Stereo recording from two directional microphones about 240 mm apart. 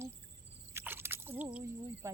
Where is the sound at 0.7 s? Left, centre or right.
Centre.